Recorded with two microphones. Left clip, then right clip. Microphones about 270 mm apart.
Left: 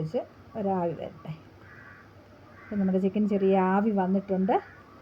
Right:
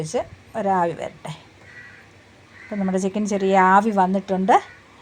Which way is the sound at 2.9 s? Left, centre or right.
Right.